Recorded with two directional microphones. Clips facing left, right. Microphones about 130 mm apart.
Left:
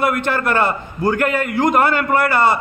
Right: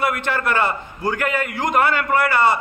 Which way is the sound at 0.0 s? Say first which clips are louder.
Left 3 dB; 45° left (ahead or behind).